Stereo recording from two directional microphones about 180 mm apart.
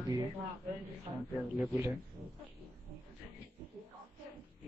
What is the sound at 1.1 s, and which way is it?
Speech, 25° right (ahead or behind).